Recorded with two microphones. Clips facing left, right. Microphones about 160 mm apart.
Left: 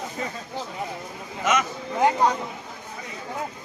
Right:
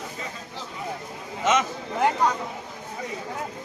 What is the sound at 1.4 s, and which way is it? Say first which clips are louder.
Speech: right 1 dB; 25° right (ahead or behind).